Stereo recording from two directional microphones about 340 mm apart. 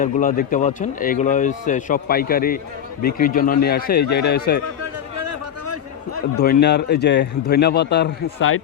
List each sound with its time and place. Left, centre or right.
0.0 s speech: left
4.8 s a sound: right
6.3 s speech: left